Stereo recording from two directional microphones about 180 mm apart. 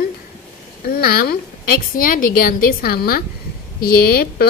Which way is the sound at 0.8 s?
55° left (ahead or behind).